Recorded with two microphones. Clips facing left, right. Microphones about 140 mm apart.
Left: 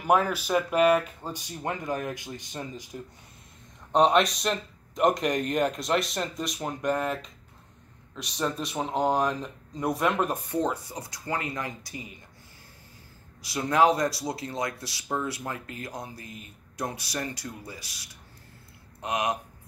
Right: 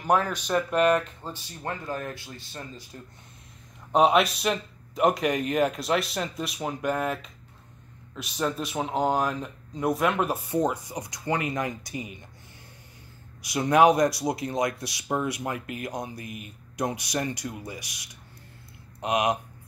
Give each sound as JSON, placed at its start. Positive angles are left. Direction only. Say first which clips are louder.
{"t": 0.0, "sound": "speech", "louder": "left 1 dB", "side_deg": 10}
{"t": 3.9, "sound": "speech", "louder": "right 1 dB", "side_deg": -5}
{"t": 13.4, "sound": "speech", "louder": "right 3 dB", "side_deg": -20}